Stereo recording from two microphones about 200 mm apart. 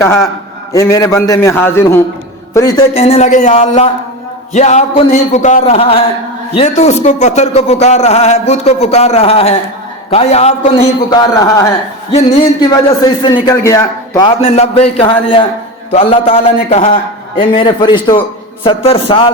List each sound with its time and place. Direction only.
0.0 s a man's voice: 15° left (ahead or behind)
2.9 s speech: 30° left (ahead or behind)
11.1 s a man's voice: 20° left (ahead or behind)
13.0 s a man's voice: 20° left (ahead or behind)